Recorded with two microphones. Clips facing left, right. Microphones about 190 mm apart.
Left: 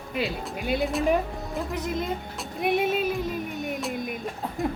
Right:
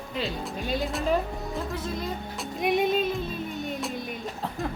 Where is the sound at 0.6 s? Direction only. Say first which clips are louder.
Left 4 dB; 15° left (ahead or behind).